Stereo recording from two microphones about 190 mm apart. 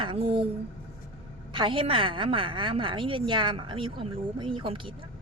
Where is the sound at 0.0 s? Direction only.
30° right (ahead or behind).